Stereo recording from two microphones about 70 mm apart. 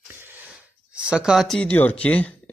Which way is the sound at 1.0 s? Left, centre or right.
Centre.